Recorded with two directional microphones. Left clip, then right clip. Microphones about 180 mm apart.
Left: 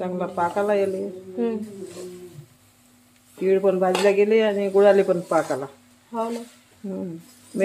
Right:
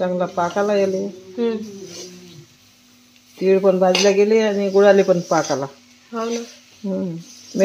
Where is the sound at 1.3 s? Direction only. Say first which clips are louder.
Right 4 dB; 5° right (ahead or behind).